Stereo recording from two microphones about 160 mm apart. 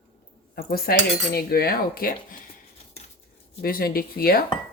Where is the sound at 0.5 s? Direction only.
70° left (ahead or behind).